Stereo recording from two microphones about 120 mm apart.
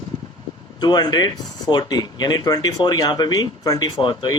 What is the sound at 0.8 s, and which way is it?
Speech, 35° left (ahead or behind).